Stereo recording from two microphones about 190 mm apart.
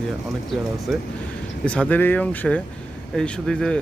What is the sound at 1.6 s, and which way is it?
Speech, 5° left (ahead or behind).